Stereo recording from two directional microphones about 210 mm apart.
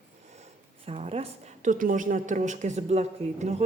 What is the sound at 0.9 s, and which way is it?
A woman's voice, 30° right (ahead or behind).